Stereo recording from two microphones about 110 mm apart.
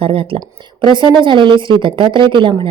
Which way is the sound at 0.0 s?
55° right (ahead or behind).